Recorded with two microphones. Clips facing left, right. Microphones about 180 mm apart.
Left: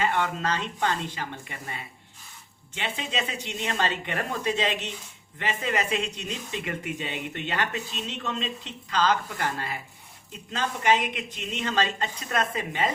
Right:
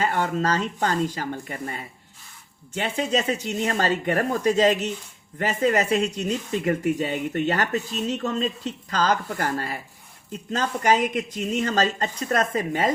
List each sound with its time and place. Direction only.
0.0 s speech: 40° right (ahead or behind)